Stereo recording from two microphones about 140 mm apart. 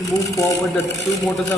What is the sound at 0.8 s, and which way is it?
Ratchet, 25° left (ahead or behind).